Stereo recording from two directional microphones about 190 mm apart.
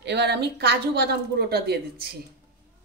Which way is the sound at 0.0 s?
60° right (ahead or behind).